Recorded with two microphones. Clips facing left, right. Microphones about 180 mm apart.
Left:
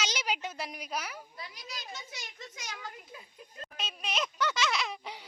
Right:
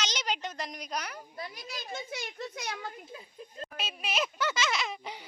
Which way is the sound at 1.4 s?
50° right (ahead or behind).